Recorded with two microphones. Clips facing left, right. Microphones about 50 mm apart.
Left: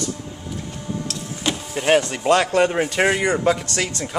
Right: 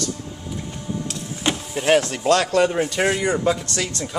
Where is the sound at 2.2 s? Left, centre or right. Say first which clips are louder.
Left 1 dB; left.